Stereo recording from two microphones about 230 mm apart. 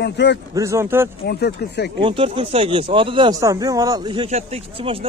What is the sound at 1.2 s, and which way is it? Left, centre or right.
Speech, left.